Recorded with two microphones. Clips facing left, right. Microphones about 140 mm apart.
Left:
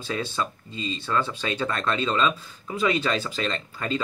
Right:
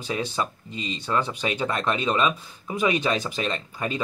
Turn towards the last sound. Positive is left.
turn(degrees=-10)  # may be behind; listen again after turning